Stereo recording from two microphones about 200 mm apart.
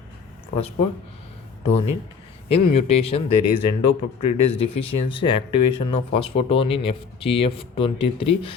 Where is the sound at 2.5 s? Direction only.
30° left (ahead or behind).